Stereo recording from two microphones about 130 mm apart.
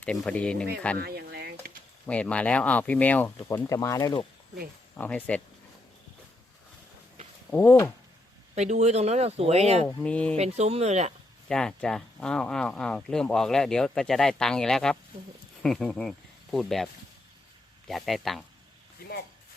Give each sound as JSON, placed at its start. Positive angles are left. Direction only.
{"t": 0.0, "sound": "speech", "side_deg": 10}
{"t": 2.0, "sound": "speech", "side_deg": 10}
{"t": 3.8, "sound": "speech", "side_deg": 30}
{"t": 4.9, "sound": "speech", "side_deg": 10}
{"t": 7.5, "sound": "speech", "side_deg": 15}
{"t": 8.5, "sound": "speech", "side_deg": -60}
{"t": 10.0, "sound": "speech", "side_deg": 10}
{"t": 10.3, "sound": "speech", "side_deg": -55}
{"t": 11.4, "sound": "speech", "side_deg": 5}